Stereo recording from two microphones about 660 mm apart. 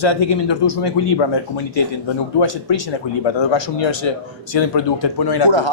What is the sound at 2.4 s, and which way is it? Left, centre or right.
Speech, left.